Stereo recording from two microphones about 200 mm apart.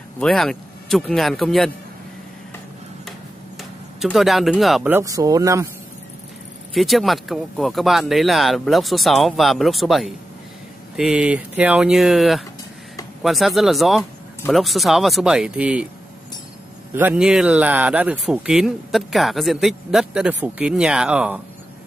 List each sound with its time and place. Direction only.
0.2 s speech: centre (ahead or behind)
4.0 s speech: centre (ahead or behind)
4.9 s speech: 15° right (ahead or behind)
6.7 s speech: centre (ahead or behind)
16.9 s speech: 10° right (ahead or behind)